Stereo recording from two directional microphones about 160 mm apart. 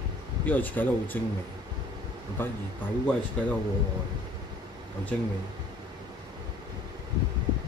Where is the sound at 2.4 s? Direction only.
15° left (ahead or behind).